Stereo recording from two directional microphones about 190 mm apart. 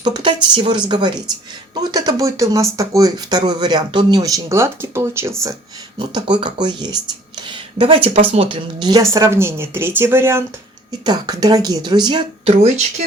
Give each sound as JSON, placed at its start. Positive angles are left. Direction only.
{"t": 0.0, "sound": "speech", "side_deg": -25}
{"t": 6.0, "sound": "speech", "side_deg": -25}